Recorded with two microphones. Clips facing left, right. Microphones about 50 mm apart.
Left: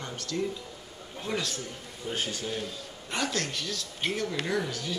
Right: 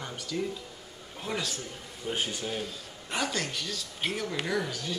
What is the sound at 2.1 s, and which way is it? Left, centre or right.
Speech, centre.